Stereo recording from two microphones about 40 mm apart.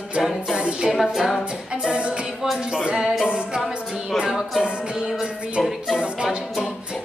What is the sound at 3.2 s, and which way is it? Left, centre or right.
Music, right.